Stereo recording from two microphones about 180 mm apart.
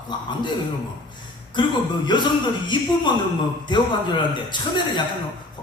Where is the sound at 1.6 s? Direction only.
25° left (ahead or behind).